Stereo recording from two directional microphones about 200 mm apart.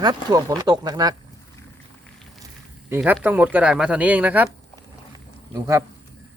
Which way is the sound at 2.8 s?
10° right (ahead or behind).